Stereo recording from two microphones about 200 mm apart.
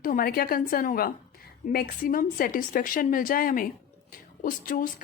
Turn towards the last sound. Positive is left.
turn(degrees=45)  # may be behind; listen again after turning